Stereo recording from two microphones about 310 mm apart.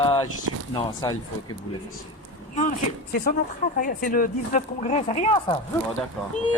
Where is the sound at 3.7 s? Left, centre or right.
Left.